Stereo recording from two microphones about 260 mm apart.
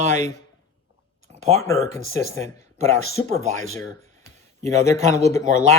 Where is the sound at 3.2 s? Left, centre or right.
Right.